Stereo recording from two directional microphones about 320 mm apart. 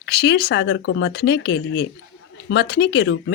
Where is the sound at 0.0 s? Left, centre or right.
Left.